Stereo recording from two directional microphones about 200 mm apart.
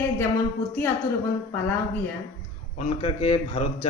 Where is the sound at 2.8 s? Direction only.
35° left (ahead or behind).